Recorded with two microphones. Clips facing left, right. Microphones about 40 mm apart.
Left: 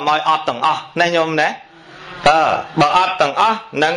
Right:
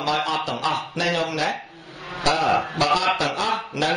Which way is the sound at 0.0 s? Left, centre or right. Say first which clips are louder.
Left 8 dB; left.